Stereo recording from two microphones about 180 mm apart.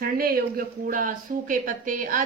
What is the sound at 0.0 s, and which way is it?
A woman's voice, 55° right (ahead or behind).